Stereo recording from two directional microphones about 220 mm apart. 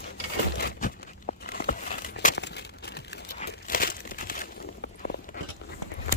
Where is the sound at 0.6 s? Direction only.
40° left (ahead or behind).